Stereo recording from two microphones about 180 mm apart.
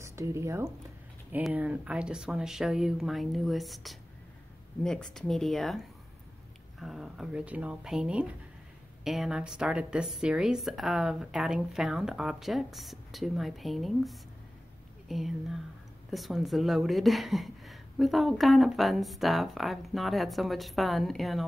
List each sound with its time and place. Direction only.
0.0 s speech: 15° right (ahead or behind); by 21.5 s centre (ahead or behind)